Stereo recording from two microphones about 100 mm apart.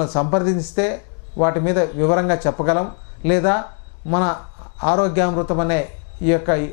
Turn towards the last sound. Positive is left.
turn(degrees=15)  # may be behind; listen again after turning